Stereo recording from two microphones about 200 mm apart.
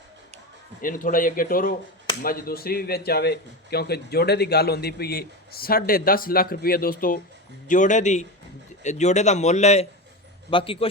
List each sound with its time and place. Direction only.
0.8 s a man's voice: 45° left (ahead or behind); by 10.8 s 25° left (ahead or behind)